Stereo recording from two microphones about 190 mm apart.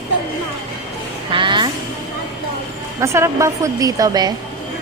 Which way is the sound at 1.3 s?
25° right (ahead or behind).